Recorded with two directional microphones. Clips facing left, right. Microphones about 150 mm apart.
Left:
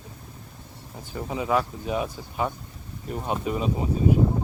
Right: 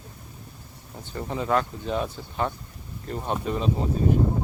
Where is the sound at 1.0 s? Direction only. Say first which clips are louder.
Even; 5° left (ahead or behind).